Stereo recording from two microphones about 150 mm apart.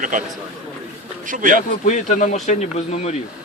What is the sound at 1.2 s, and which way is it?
Speech, 60° right (ahead or behind).